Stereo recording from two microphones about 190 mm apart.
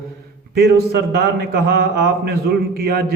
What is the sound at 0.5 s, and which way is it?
A man's voice, 55° right (ahead or behind).